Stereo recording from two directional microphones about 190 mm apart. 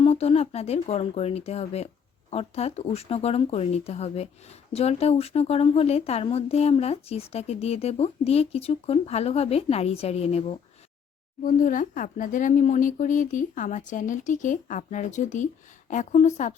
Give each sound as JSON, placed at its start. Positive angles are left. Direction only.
{"t": 0.0, "sound": "speech", "side_deg": 35}
{"t": 11.4, "sound": "speech", "side_deg": 45}